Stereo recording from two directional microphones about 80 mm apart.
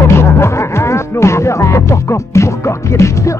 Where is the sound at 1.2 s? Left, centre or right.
Left.